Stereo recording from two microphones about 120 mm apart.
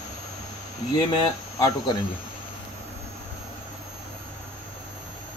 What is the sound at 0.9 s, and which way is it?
Speech, 35° left (ahead or behind).